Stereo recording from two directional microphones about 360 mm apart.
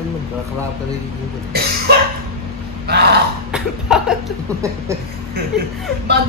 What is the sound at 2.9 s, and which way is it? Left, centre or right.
Burping, right.